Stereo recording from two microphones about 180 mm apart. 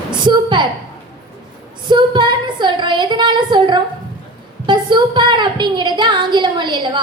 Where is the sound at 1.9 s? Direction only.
25° right (ahead or behind).